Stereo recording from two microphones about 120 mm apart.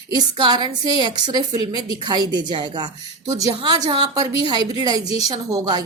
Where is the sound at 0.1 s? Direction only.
35° right (ahead or behind).